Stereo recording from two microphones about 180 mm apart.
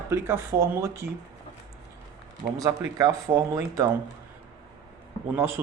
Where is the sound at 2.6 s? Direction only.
20° right (ahead or behind).